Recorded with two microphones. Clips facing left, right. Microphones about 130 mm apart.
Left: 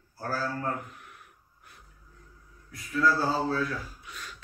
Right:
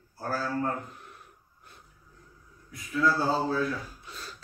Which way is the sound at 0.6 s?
30° right (ahead or behind).